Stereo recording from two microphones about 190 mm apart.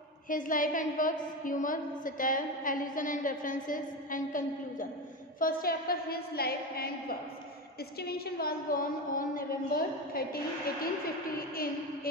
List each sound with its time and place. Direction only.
0.3 s a woman's voice: 45° left (ahead or behind)
8.0 s a woman's voice: 55° left (ahead or behind)
11.3 s a woman's voice: 50° left (ahead or behind)